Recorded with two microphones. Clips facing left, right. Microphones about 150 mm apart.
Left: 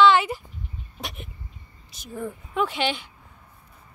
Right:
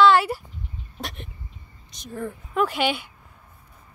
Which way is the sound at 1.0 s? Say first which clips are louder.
Right 1 dB; 5° left (ahead or behind).